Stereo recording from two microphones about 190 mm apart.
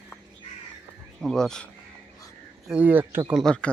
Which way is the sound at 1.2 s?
Centre (ahead or behind).